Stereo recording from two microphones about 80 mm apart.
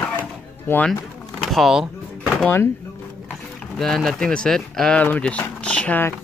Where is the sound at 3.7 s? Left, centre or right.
Centre.